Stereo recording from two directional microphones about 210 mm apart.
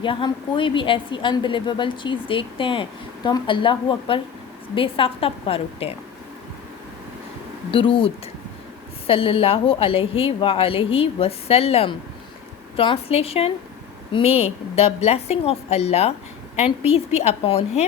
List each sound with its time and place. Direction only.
0.0 s a woman's voice: 25° left (ahead or behind)
7.7 s a woman's voice: 25° left (ahead or behind)